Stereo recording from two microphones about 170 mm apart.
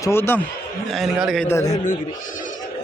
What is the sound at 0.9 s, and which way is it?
Speech, centre (ahead or behind).